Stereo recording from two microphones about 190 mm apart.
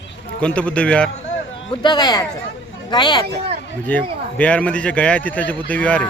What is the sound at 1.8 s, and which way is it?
Speech, 20° left (ahead or behind).